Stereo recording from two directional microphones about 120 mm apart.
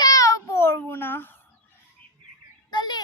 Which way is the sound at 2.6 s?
40° left (ahead or behind).